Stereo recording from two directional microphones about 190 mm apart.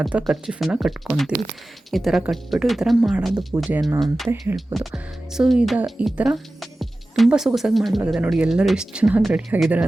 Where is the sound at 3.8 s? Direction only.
15° right (ahead or behind).